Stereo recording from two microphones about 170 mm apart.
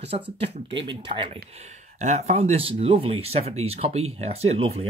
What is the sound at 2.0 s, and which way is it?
Speech, 45° right (ahead or behind).